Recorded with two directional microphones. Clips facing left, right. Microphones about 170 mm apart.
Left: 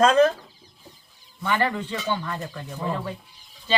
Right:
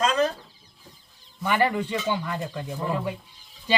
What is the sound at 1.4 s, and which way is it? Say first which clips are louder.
Speech: right 1 dB; 15° right (ahead or behind).